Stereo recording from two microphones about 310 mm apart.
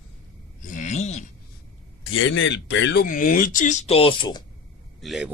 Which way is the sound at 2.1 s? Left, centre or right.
Left.